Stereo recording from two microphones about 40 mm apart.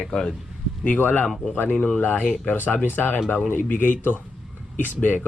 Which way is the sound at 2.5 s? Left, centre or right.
Left.